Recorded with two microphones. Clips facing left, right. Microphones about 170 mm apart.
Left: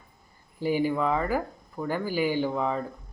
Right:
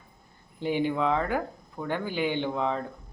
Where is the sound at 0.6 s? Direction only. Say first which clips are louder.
Left 1 dB; 5° left (ahead or behind).